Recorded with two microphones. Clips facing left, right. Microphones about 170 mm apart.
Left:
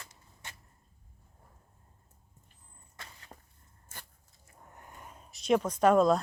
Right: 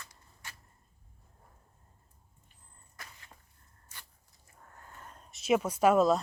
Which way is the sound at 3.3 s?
45° left (ahead or behind).